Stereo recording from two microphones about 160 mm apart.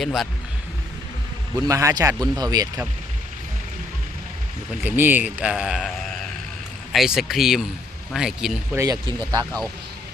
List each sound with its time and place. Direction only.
0.0 s speech: centre (ahead or behind)
1.5 s speech: 20° right (ahead or behind)
4.8 s speech: 10° right (ahead or behind)
8.7 s speech: 20° right (ahead or behind)